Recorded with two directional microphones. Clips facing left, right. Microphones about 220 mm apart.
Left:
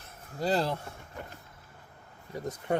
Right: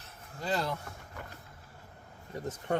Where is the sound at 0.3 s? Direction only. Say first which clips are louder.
Left 5 dB; 35° left (ahead or behind).